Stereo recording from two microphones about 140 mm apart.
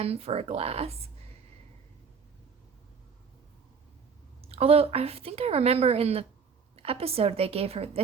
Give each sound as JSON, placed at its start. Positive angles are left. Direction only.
{"t": 0.0, "sound": "a woman's voice", "side_deg": -45}
{"t": 4.4, "sound": "a woman's voice", "side_deg": -45}